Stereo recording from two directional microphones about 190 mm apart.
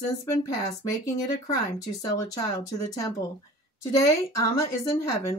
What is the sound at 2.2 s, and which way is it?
Speech, 20° left (ahead or behind).